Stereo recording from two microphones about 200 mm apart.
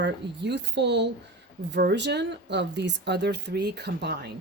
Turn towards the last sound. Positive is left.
turn(degrees=-55)  # may be behind; listen again after turning